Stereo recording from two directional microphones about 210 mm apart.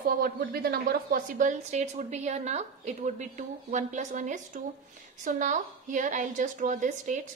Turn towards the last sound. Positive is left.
turn(degrees=-35)  # may be behind; listen again after turning